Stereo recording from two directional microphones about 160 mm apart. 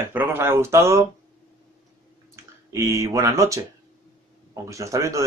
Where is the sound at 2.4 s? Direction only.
15° right (ahead or behind).